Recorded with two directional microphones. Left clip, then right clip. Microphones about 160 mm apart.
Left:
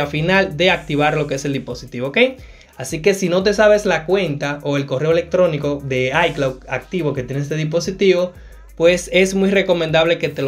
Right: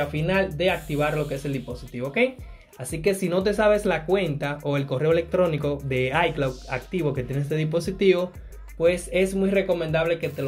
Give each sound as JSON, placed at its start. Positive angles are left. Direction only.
{"t": 0.0, "sound": "speech", "side_deg": 20}
{"t": 2.8, "sound": "speech", "side_deg": 10}
{"t": 8.7, "sound": "speech", "side_deg": 15}